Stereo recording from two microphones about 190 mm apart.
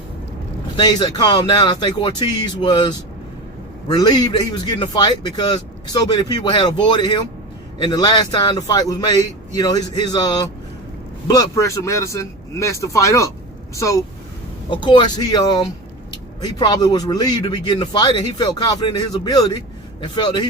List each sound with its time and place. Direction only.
0.8 s a man's voice: 20° left (ahead or behind)